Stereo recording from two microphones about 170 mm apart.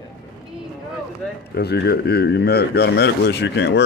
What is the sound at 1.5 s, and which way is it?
Speech, 75° left (ahead or behind).